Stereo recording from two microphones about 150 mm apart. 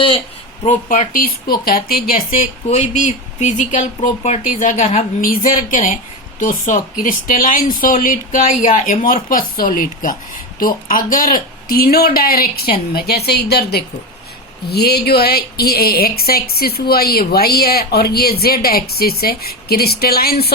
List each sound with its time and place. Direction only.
0.6 s speech: 55° left (ahead or behind); by 2.1 s 85° left
2.6 s speech: 50° left (ahead or behind)
5.3 s a woman's voice: 65° left (ahead or behind); by 20.5 s 90° left